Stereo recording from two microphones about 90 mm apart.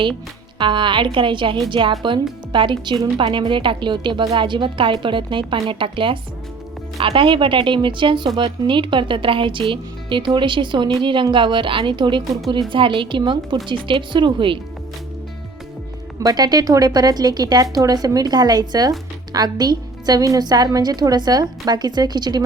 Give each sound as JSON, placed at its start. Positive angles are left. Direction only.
{"t": 0.6, "sound": "a woman's voice", "side_deg": -65}
{"t": 16.2, "sound": "speech", "side_deg": -50}